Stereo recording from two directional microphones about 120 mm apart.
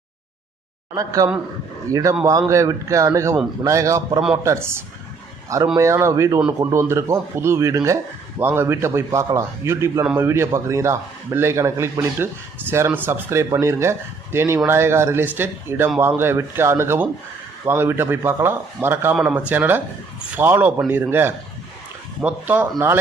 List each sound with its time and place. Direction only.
0.9 s a man's voice: 30° right (ahead or behind); by 22.7 s 15° right (ahead or behind)